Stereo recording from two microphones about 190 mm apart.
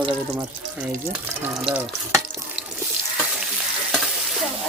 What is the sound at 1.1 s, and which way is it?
Speech, 5° right (ahead or behind).